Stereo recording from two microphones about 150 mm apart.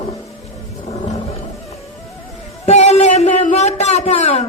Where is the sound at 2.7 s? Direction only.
45° left (ahead or behind).